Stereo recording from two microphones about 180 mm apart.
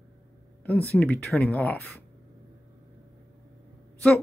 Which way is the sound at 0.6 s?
10° left (ahead or behind).